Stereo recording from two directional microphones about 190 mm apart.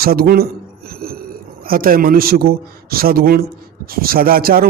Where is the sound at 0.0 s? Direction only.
50° right (ahead or behind).